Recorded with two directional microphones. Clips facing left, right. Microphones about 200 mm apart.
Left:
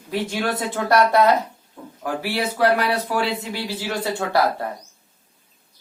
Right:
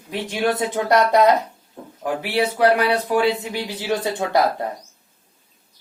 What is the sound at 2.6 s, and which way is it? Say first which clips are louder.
Speech: right 1 dB; 20° right (ahead or behind).